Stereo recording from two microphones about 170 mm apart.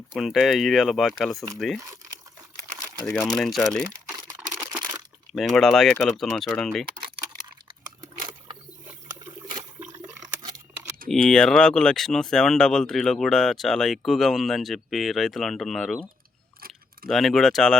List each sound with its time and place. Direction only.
0.2 s speech: centre (ahead or behind)
3.1 s speech: 5° left (ahead or behind)
4.4 s camera: 10° right (ahead or behind)
5.3 s speech: centre (ahead or behind)
9.9 s a sound: 20° right (ahead or behind)
11.1 s speech: 5° left (ahead or behind)
16.6 s a sound: 60° right (ahead or behind)
17.1 s speech: centre (ahead or behind)